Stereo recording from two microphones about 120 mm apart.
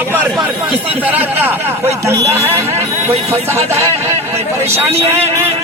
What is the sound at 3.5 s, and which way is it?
A man's voice, 20° right (ahead or behind).